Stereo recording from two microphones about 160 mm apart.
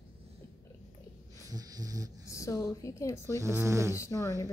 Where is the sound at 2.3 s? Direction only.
20° left (ahead or behind).